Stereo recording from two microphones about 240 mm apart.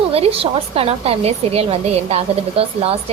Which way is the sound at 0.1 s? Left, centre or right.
Right.